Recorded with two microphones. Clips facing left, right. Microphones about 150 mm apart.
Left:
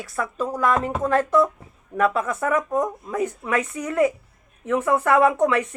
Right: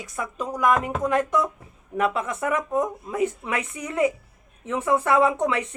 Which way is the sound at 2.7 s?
40° left (ahead or behind).